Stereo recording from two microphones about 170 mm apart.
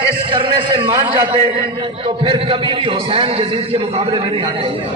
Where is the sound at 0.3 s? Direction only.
30° right (ahead or behind).